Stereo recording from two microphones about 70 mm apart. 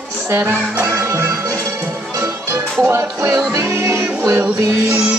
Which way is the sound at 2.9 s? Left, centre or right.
Right.